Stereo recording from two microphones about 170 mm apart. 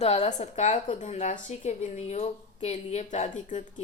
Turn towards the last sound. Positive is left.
turn(degrees=45)  # may be behind; listen again after turning